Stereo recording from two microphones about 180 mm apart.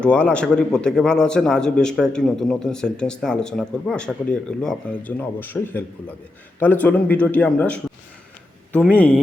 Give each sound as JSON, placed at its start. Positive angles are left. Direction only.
{"t": 0.0, "sound": "a man's voice", "side_deg": 5}
{"t": 9.0, "sound": "speech", "side_deg": 5}